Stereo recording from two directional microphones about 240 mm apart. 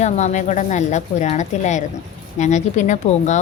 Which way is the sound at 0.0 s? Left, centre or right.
Left.